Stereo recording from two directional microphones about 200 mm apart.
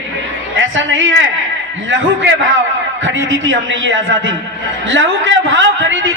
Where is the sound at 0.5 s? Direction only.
70° right (ahead or behind).